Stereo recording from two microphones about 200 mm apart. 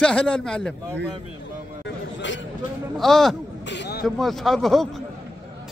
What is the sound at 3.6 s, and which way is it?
Speech, 60° left (ahead or behind).